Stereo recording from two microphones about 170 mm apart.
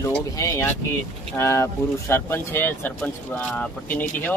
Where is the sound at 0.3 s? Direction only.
15° left (ahead or behind).